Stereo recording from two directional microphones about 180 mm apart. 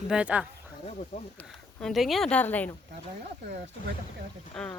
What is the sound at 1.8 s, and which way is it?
Speech, centre (ahead or behind).